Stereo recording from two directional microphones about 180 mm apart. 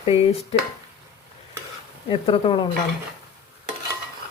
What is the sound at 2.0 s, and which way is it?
Speech, 30° left (ahead or behind).